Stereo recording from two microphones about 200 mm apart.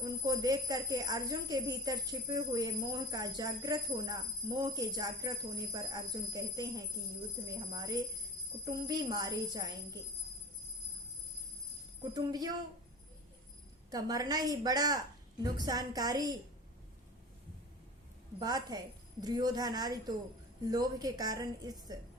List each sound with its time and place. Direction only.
0.0 s speech: 20° right (ahead or behind)
12.1 s speech: 20° right (ahead or behind)
13.9 s speech: 20° right (ahead or behind)
18.3 s speech: 20° right (ahead or behind)